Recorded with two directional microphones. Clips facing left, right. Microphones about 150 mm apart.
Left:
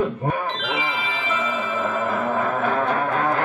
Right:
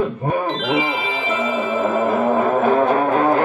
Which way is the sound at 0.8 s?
15° right (ahead or behind).